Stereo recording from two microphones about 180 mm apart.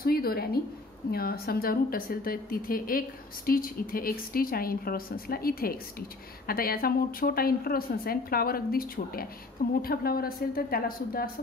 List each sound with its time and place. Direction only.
0.0 s a woman's voice: 55° left (ahead or behind)